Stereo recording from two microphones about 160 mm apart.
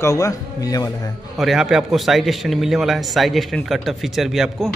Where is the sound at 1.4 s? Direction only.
Centre (ahead or behind).